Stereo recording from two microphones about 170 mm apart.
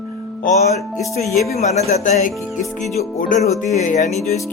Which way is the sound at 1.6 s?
40° left (ahead or behind).